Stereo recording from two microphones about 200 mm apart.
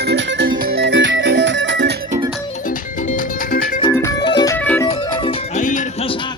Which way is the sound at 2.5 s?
40° left (ahead or behind).